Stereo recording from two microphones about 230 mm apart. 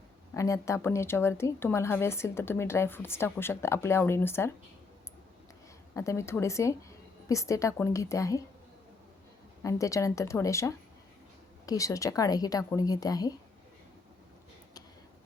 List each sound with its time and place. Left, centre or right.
0.3 s speech: centre
5.9 s speech: centre
9.6 s speech: centre